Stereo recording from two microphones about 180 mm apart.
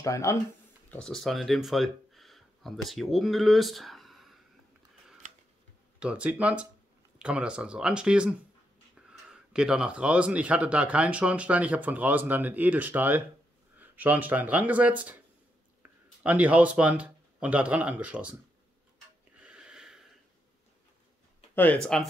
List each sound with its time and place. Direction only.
0.0 s speech: 15° left (ahead or behind)
0.8 s speech: 5° left (ahead or behind)
5.9 s speech: 5° right (ahead or behind)
19.3 s wheeze: 5° right (ahead or behind)
21.9 s speech: 5° left (ahead or behind)